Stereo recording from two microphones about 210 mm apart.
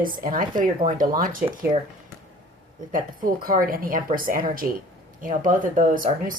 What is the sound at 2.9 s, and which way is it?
Speech, 40° right (ahead or behind).